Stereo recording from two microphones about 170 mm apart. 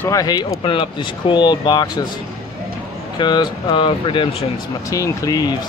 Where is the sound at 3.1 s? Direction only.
25° left (ahead or behind).